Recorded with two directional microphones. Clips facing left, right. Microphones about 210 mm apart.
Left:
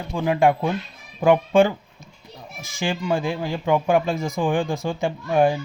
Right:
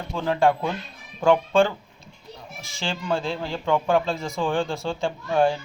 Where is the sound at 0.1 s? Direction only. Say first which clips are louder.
Left 2 dB; 15° left (ahead or behind).